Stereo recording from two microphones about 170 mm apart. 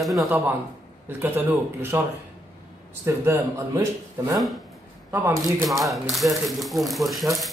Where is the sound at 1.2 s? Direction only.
10° right (ahead or behind).